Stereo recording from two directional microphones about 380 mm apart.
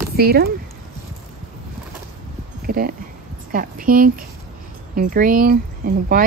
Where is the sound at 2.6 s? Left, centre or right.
Right.